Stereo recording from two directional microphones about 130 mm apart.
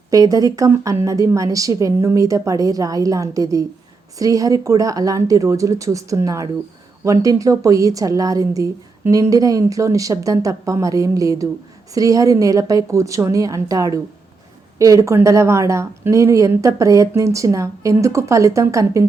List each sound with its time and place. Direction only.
0.1 s a woman's voice: 25° right (ahead or behind)